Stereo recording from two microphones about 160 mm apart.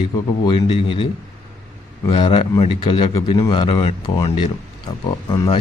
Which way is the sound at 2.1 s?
35° left (ahead or behind).